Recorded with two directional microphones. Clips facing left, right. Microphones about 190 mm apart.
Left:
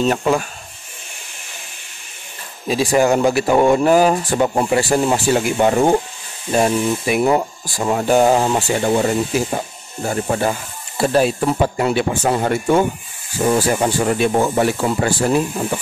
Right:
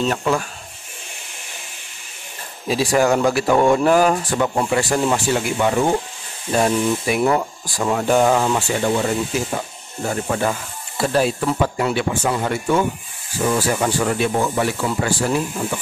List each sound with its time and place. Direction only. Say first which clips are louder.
0.2 s speech: left 3 dB; 15° left (ahead or behind)
2.9 s speech: left 2 dB; 20° left (ahead or behind); by 5.9 s 35° left (ahead or behind)
6.5 s speech: left 1 dB; 10° left (ahead or behind)
7.8 s speech: left 2 dB; 25° left (ahead or behind)
11.9 s speech: left 3 dB; 45° left (ahead or behind)
13.5 s speech: left 3 dB; 25° left (ahead or behind)